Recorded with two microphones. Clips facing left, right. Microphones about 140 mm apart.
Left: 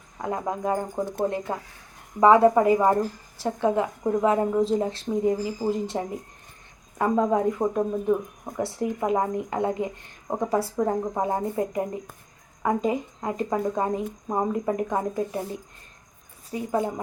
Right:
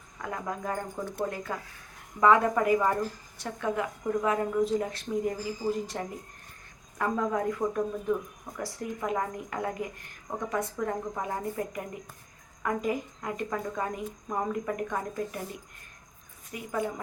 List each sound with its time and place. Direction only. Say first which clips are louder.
0.2 s speech: left 7 dB; 30° left (ahead or behind)
16.5 s speech: left 6 dB; 30° left (ahead or behind)